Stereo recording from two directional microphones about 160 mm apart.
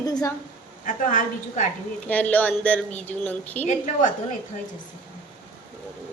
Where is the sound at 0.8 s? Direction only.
55° left (ahead or behind).